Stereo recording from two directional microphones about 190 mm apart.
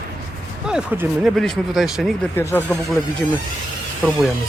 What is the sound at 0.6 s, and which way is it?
Speech, 5° right (ahead or behind).